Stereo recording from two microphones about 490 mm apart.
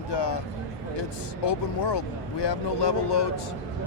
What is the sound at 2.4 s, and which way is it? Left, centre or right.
Speech, left.